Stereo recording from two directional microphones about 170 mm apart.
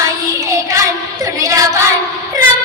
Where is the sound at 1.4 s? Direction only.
20° right (ahead or behind).